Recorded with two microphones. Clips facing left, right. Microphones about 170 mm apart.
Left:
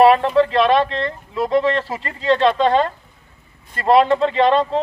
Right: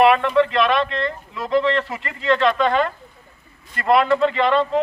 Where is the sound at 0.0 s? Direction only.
35° left (ahead or behind).